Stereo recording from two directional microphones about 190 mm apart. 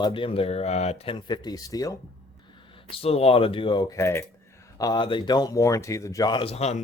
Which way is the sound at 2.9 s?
30° left (ahead or behind).